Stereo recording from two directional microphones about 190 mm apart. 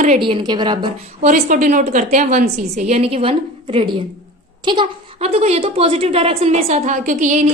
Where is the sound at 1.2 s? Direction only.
45° right (ahead or behind).